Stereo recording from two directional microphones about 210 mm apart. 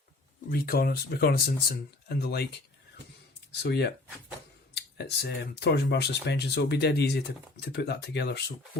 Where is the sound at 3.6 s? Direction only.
50° left (ahead or behind).